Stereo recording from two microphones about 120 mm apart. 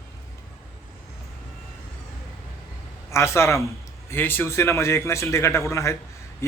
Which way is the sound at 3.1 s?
25° left (ahead or behind).